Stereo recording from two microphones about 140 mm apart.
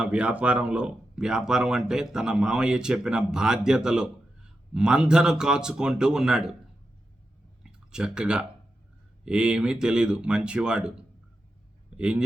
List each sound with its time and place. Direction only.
0.0 s speech: 10° right (ahead or behind)
7.6 s speech: 5° right (ahead or behind)
11.9 s a man's voice: 5° right (ahead or behind)